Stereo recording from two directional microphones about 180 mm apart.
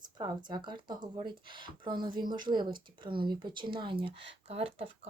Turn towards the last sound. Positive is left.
turn(degrees=-35)  # may be behind; listen again after turning